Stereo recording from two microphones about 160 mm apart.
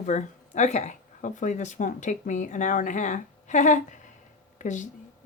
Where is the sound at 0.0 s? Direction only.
50° left (ahead or behind).